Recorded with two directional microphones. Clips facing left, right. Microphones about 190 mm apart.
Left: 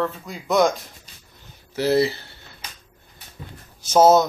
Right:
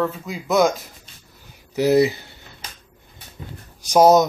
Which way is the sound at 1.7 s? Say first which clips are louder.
Right 3 dB; 15° right (ahead or behind).